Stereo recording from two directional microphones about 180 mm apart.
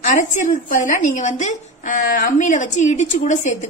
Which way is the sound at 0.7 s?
45° left (ahead or behind).